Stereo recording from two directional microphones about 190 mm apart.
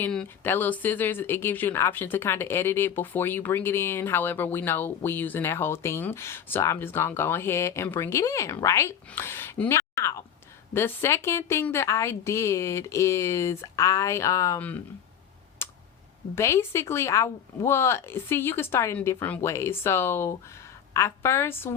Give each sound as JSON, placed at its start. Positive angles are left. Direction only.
{"t": 0.0, "sound": "speech", "side_deg": 5}
{"t": 15.6, "sound": "a sound", "side_deg": 15}
{"t": 16.3, "sound": "speech", "side_deg": 15}